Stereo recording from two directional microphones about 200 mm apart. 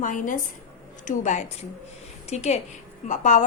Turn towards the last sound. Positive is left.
turn(degrees=40)  # may be behind; listen again after turning